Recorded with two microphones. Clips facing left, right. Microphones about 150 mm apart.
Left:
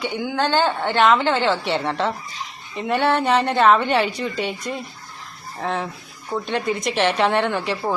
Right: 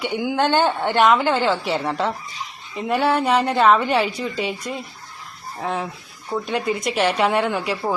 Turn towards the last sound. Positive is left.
turn(degrees=-5)  # may be behind; listen again after turning